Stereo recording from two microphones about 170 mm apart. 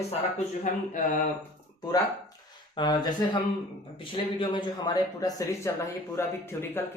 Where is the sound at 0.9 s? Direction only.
50° left (ahead or behind).